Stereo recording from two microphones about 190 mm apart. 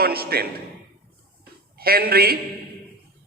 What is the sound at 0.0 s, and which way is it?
Speech, 55° right (ahead or behind).